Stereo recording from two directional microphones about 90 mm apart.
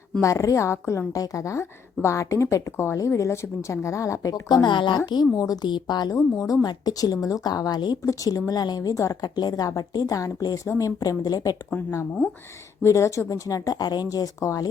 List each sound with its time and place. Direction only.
0.2 s a woman's voice: 35° left (ahead or behind)
5.6 s speech: 55° left (ahead or behind)
6.1 s speech: 35° left (ahead or behind); by 7.9 s 50° left (ahead or behind)
8.0 s a woman's voice: 40° left (ahead or behind)
12.8 s a woman's voice: 35° left (ahead or behind)